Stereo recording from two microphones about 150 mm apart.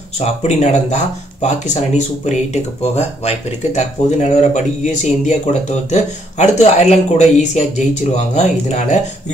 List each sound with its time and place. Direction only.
0.2 s speech: 45° left (ahead or behind)